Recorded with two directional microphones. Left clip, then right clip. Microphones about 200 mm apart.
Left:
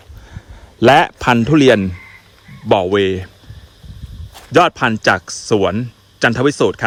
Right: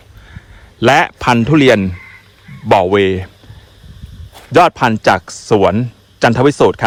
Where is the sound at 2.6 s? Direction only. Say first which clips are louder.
Right 3 dB; 15° left (ahead or behind).